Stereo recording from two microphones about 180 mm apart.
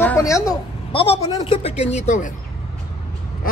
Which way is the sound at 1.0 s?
30° left (ahead or behind).